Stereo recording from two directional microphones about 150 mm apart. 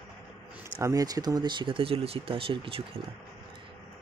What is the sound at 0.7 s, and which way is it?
Speech, 25° right (ahead or behind).